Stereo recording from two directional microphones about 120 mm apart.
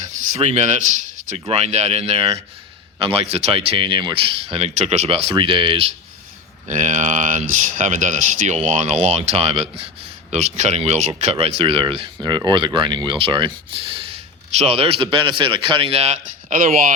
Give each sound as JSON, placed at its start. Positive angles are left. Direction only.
{"t": 0.3, "sound": "speech", "side_deg": -65}
{"t": 6.7, "sound": "speech", "side_deg": -90}
{"t": 10.3, "sound": "speech", "side_deg": -70}